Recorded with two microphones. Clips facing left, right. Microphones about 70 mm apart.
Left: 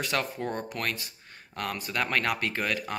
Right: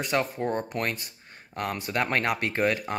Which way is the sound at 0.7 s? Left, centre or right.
Right.